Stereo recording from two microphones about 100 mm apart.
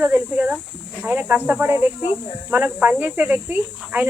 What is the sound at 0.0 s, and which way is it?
Speech, 15° right (ahead or behind).